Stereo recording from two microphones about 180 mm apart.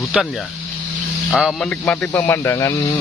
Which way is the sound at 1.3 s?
Centre (ahead or behind).